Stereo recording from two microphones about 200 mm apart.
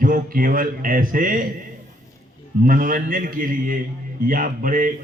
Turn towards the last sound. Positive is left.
turn(degrees=-45)  # may be behind; listen again after turning